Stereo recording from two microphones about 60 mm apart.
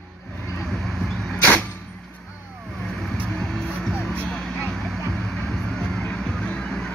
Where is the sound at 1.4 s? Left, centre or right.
Left.